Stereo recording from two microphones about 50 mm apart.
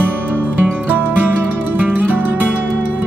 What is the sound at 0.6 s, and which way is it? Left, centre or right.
Music, right.